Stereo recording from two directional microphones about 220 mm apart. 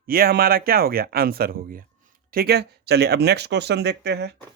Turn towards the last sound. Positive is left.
turn(degrees=-50)  # may be behind; listen again after turning